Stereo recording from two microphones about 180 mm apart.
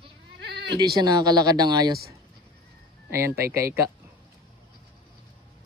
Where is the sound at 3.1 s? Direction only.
15° right (ahead or behind).